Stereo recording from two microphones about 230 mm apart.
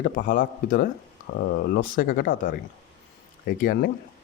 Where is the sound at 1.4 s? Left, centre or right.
Left.